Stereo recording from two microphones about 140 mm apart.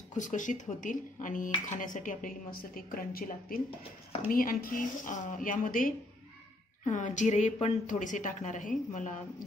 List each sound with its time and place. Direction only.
0.1 s a woman's voice: 60° left (ahead or behind)
6.8 s speech: 60° left (ahead or behind)